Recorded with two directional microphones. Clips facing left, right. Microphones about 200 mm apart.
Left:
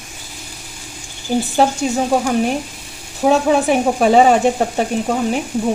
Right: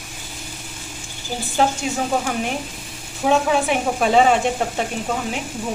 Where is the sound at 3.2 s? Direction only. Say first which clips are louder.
Left 4 dB; 40° left (ahead or behind).